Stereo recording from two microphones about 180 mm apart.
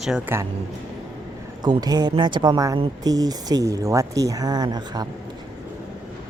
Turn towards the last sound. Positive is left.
turn(degrees=-20)  # may be behind; listen again after turning